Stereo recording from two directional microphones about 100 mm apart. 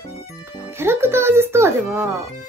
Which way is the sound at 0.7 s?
25° right (ahead or behind).